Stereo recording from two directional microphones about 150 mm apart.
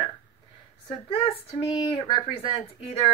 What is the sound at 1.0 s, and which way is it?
Speech, 35° left (ahead or behind).